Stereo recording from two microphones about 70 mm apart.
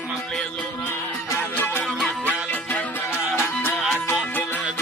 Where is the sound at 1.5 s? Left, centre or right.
Left.